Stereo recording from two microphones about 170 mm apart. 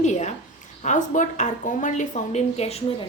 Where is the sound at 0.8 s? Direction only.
45° left (ahead or behind).